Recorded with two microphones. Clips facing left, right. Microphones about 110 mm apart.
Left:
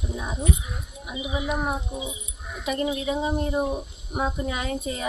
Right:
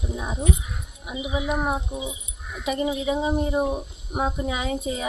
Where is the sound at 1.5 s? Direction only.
20° right (ahead or behind).